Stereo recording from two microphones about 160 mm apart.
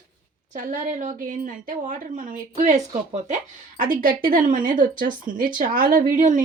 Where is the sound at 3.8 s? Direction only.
60° right (ahead or behind).